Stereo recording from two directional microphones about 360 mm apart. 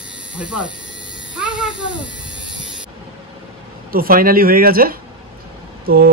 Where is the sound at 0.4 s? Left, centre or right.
Centre.